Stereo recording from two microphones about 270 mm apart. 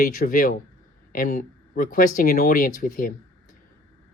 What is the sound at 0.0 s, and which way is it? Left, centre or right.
Speech, left.